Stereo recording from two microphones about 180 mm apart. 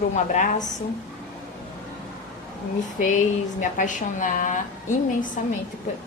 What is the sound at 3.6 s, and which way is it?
A woman's voice, 45° left (ahead or behind).